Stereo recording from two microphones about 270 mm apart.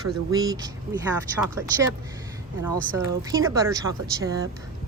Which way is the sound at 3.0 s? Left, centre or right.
Centre.